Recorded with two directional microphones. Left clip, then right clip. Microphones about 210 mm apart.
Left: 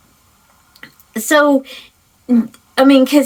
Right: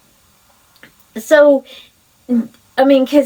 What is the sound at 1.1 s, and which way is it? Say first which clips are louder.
Speech: right 3 dB; 35° left (ahead or behind).